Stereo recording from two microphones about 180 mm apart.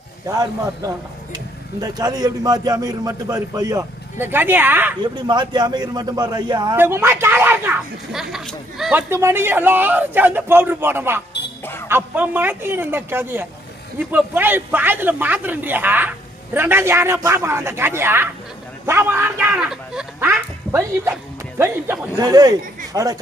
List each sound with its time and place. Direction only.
0.3 s a man's voice: 20° right (ahead or behind)
5.1 s a man's voice: 25° right (ahead or behind)
6.7 s speech: 15° right (ahead or behind)
11.6 s a sound: 10° left (ahead or behind)
11.9 s speech: 10° right (ahead or behind)
22.2 s a man's voice: 20° right (ahead or behind)